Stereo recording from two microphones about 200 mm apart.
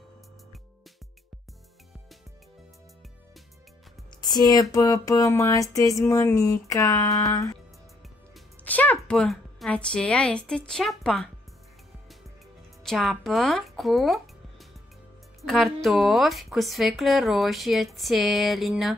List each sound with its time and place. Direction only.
4.2 s a sound: 20° left (ahead or behind)
8.6 s a woman's voice: 10° left (ahead or behind)
12.8 s a woman's voice: centre (ahead or behind)